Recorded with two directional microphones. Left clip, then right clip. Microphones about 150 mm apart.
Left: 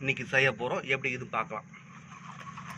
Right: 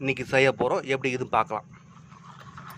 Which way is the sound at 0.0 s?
40° right (ahead or behind).